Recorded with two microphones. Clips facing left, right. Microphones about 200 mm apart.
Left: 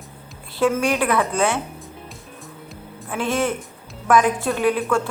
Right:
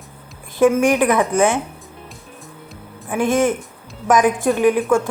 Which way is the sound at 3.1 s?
15° right (ahead or behind).